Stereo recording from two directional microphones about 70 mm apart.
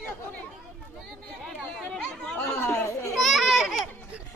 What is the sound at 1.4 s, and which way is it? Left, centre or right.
Chatter, centre.